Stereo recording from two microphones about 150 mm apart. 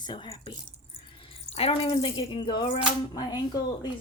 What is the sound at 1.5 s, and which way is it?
Speech, 40° left (ahead or behind).